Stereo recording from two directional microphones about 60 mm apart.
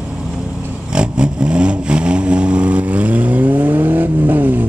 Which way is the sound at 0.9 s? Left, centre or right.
Centre.